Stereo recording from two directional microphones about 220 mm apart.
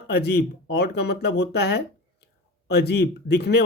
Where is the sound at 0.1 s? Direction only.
50° left (ahead or behind).